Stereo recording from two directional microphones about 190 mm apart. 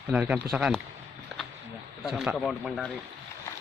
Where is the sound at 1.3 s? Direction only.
Centre (ahead or behind).